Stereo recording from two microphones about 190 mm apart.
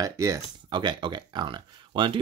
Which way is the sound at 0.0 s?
15° right (ahead or behind).